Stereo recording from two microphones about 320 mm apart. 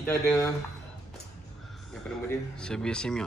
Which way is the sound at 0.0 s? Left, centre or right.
Centre.